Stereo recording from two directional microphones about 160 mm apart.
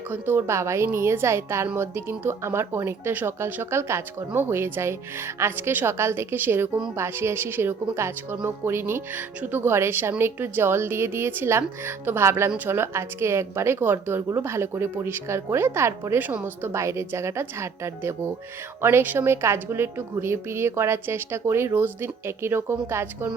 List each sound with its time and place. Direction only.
0.1 s a woman's voice: 15° right (ahead or behind)